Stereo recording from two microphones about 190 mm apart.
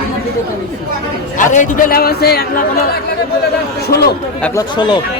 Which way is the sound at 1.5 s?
45° left (ahead or behind).